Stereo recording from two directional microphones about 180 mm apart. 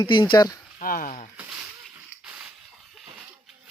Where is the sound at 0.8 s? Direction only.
50° left (ahead or behind).